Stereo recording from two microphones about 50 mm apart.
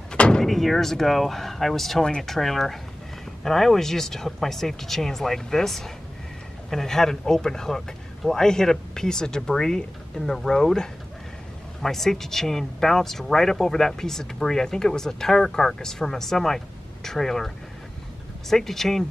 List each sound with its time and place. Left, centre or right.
0.1 s door: centre
0.4 s speech: centre
18.5 s speech: centre